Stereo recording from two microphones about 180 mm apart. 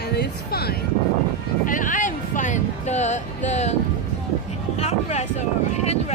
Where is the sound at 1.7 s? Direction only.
45° left (ahead or behind).